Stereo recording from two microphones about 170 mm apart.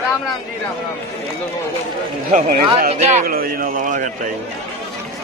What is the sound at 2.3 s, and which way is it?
Speech, 55° right (ahead or behind).